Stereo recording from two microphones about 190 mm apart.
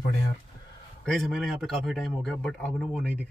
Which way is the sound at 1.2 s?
Centre (ahead or behind).